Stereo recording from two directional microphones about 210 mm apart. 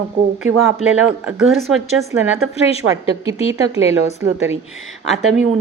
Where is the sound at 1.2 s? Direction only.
Centre (ahead or behind).